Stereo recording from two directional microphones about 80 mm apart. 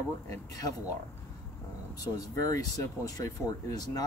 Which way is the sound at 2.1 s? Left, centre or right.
Left.